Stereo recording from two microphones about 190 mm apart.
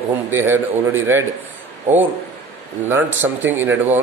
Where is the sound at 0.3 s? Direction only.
10° right (ahead or behind).